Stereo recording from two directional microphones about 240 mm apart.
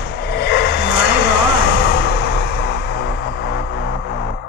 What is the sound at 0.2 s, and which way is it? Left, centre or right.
Vehicle, left.